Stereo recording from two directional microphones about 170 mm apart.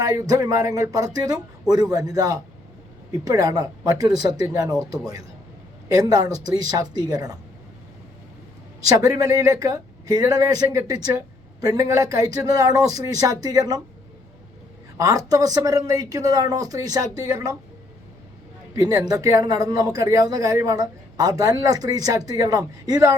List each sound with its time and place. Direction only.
0.0 s speech: 20° right (ahead or behind)
8.8 s speech: 20° right (ahead or behind)
14.9 s speech: 20° right (ahead or behind)
18.7 s speech: 20° right (ahead or behind)